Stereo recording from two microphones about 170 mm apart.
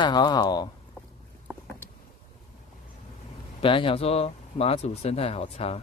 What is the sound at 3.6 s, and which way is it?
Speech, 30° left (ahead or behind).